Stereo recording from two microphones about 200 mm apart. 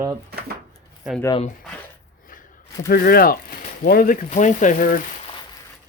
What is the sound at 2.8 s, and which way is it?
Speech, 50° left (ahead or behind).